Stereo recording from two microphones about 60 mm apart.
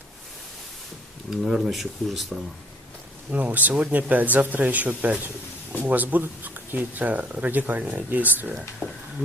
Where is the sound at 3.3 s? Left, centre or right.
Right.